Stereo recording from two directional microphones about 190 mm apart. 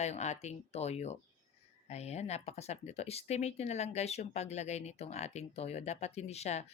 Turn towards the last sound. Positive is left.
turn(degrees=35)  # may be behind; listen again after turning